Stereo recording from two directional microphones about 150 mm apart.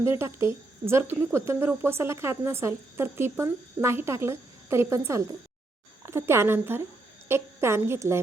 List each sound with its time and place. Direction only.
0.0 s speech: 20° right (ahead or behind)